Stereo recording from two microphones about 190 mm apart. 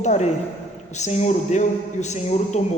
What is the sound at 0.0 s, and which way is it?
A man's voice, 35° left (ahead or behind).